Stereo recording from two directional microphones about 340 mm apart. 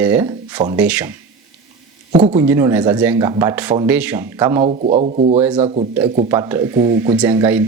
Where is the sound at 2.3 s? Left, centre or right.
Centre.